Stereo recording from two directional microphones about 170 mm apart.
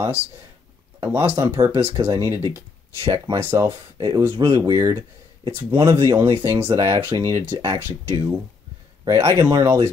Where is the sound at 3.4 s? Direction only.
15° right (ahead or behind).